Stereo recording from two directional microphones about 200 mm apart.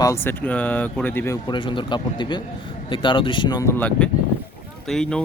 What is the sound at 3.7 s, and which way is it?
Speech, 5° left (ahead or behind).